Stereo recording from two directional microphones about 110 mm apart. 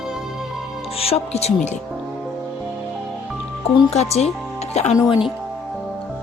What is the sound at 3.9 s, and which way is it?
Speech, 70° left (ahead or behind).